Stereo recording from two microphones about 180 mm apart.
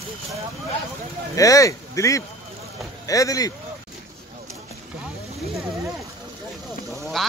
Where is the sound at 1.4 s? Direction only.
20° left (ahead or behind).